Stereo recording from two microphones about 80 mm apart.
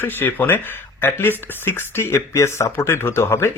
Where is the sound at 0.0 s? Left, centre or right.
Left.